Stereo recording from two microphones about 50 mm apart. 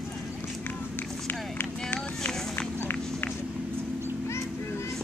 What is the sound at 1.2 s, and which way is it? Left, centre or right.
Run, left.